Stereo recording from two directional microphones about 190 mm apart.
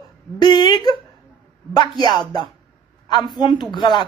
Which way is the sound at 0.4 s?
25° left (ahead or behind).